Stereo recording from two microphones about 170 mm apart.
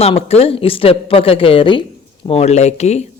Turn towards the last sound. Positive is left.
turn(degrees=40)  # may be behind; listen again after turning